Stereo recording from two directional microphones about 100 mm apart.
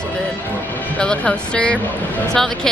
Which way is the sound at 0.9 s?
10° left (ahead or behind).